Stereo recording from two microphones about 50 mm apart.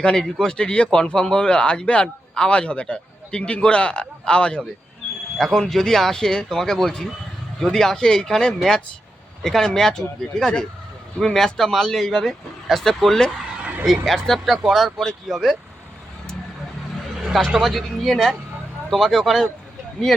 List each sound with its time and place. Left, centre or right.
0.0 s a man's voice: centre
5.5 s speech: centre
17.2 s a sound: centre
17.5 s speech: centre